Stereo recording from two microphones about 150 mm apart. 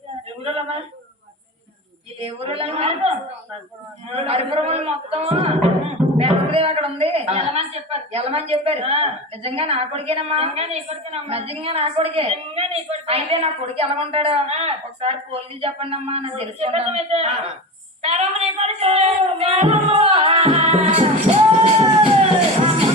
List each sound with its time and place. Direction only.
0.4 s a man's voice: 45° right (ahead or behind)
2.1 s a man's voice: 40° right (ahead or behind)
4.1 s a man's voice: 45° right (ahead or behind)